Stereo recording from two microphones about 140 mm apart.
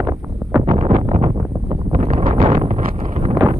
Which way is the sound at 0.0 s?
20° right (ahead or behind).